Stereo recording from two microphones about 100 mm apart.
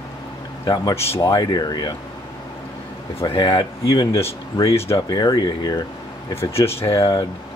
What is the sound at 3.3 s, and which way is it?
Speech, 50° left (ahead or behind).